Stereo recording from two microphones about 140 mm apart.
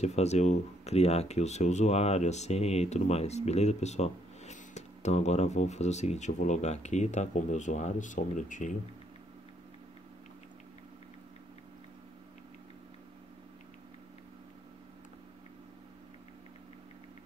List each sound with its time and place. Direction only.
0.0 s speech: 50° left (ahead or behind)